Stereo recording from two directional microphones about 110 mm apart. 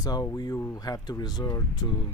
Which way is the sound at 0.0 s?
35° left (ahead or behind).